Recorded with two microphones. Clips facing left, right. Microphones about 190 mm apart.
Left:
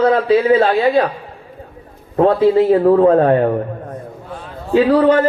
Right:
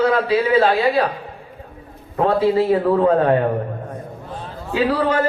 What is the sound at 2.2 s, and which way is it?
A man's voice, 35° left (ahead or behind).